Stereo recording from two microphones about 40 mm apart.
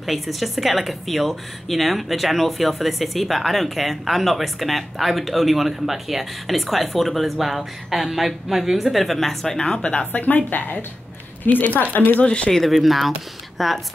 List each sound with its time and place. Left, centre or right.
0.0 s speech: centre
9.6 s speech: left
10.1 s a woman's voice: left
12.3 s speech: left
12.5 s speech: centre